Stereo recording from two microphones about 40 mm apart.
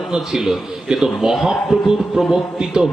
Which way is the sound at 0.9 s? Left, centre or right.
Centre.